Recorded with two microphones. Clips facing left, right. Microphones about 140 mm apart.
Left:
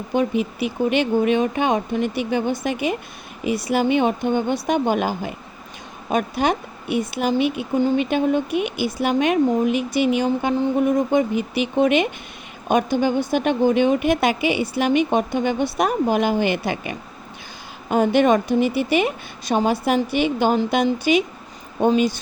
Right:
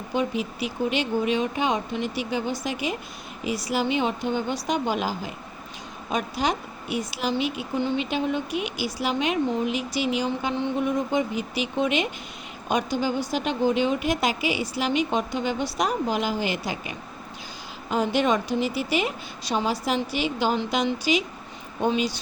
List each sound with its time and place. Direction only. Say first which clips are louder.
0.1 s a woman's voice: left 5 dB; 55° left (ahead or behind)